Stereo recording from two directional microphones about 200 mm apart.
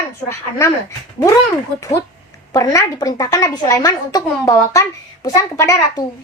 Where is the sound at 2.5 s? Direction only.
15° left (ahead or behind).